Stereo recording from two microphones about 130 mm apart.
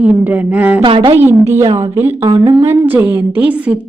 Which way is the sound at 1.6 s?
30° right (ahead or behind).